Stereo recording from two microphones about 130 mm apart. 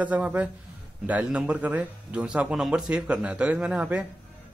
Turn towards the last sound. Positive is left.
turn(degrees=-10)  # may be behind; listen again after turning